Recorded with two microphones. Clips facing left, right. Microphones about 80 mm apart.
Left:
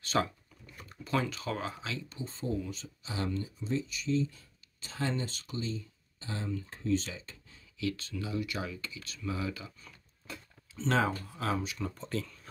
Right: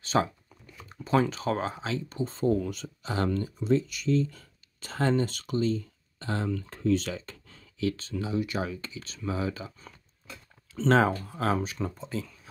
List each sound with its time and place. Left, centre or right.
0.0 s a sound: right
0.8 s speech: right
7.8 s speech: right
10.9 s speech: right
12.0 s speech: centre